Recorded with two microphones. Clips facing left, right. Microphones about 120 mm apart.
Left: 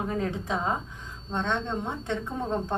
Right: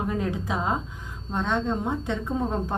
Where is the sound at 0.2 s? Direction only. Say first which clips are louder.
Right 1 dB; 5° right (ahead or behind).